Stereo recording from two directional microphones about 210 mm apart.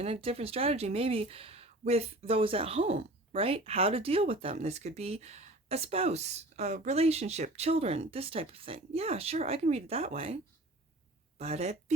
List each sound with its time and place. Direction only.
0.0 s speech: 30° right (ahead or behind)